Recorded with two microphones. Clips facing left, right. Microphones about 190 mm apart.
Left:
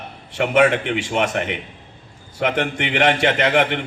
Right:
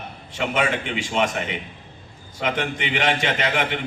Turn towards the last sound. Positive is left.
turn(degrees=60)  # may be behind; listen again after turning